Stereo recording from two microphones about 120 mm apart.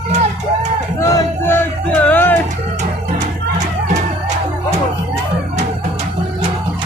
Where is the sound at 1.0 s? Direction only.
20° left (ahead or behind).